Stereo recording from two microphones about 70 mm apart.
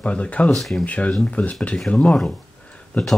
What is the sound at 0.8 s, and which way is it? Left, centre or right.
Speech, centre.